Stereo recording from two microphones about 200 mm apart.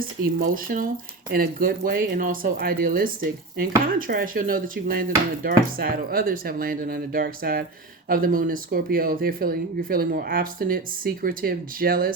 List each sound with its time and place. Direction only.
0.0 s speech: 45° right (ahead or behind)